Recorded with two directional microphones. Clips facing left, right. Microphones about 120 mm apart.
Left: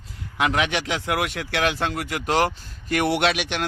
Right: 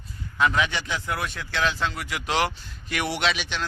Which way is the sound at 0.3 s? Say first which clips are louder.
Left 1 dB; 70° left (ahead or behind).